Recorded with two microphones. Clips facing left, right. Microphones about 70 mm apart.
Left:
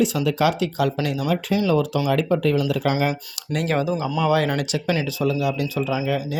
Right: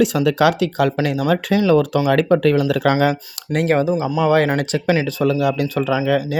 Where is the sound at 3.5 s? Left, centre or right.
Right.